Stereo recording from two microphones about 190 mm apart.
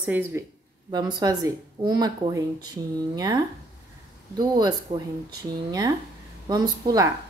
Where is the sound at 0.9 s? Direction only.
20° right (ahead or behind).